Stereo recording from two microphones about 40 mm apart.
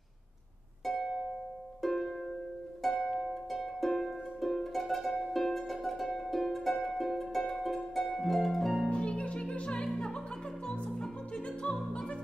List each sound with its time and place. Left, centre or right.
1.8 s music: centre
8.9 s music: left